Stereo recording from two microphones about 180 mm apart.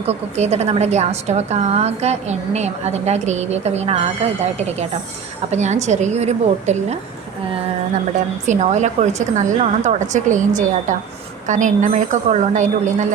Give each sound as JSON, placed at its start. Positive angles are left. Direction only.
{"t": 0.0, "sound": "a woman's voice", "side_deg": -35}
{"t": 8.4, "sound": "speech", "side_deg": -40}